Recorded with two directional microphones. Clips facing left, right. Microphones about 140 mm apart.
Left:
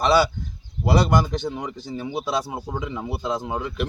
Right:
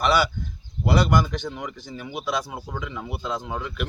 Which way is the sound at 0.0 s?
30° left (ahead or behind).